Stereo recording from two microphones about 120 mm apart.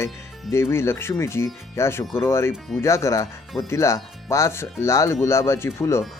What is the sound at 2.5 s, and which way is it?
Speech, 5° left (ahead or behind).